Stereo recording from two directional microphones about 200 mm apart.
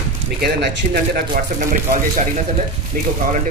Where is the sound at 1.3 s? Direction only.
40° right (ahead or behind).